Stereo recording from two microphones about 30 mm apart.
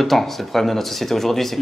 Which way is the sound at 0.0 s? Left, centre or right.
Centre.